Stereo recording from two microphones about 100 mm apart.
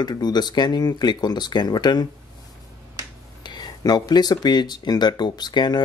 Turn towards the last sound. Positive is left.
turn(degrees=45)  # may be behind; listen again after turning